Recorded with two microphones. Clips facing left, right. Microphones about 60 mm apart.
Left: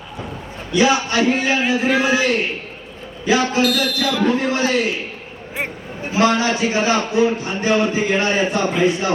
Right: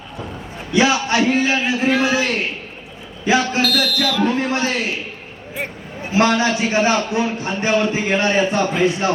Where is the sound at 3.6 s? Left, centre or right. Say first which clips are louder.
Left 1 dB; left.